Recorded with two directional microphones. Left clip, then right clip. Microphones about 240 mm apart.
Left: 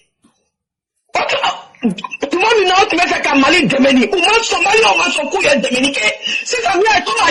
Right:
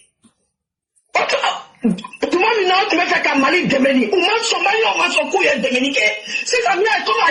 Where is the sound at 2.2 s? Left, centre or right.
Left.